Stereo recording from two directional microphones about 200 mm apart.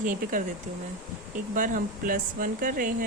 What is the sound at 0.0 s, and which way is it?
Speech, 40° right (ahead or behind).